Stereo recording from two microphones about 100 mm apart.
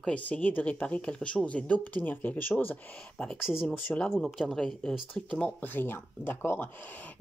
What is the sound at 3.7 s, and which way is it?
Speech, 15° left (ahead or behind).